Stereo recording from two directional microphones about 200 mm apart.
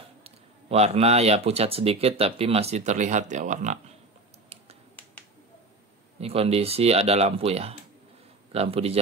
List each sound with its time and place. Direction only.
0.2 s speech: 30° right (ahead or behind)
6.1 s speech: 30° right (ahead or behind)